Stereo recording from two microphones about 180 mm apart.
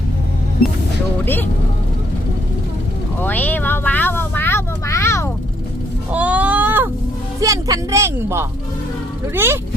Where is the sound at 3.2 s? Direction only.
10° left (ahead or behind).